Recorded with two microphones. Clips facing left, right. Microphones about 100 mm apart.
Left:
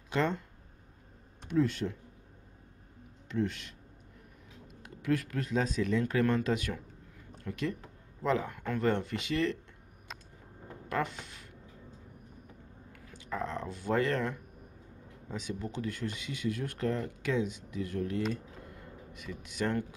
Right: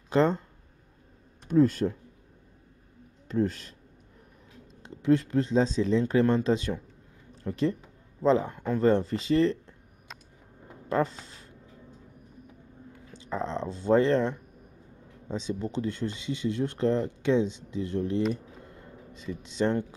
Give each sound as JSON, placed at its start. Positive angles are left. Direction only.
{"t": 0.1, "sound": "speech", "side_deg": -35}
{"t": 1.5, "sound": "speech", "side_deg": -40}
{"t": 3.3, "sound": "speech", "side_deg": -40}
{"t": 4.8, "sound": "speech", "side_deg": -25}
{"t": 10.9, "sound": "speech", "side_deg": -35}
{"t": 12.9, "sound": "a sound", "side_deg": -30}
{"t": 15.2, "sound": "speech", "side_deg": -30}
{"t": 18.3, "sound": "a sound", "side_deg": -30}